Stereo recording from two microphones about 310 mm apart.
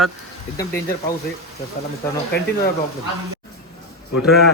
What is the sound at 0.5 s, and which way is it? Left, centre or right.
Speech, centre.